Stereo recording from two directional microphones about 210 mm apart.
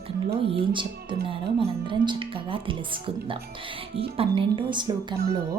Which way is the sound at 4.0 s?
25° right (ahead or behind).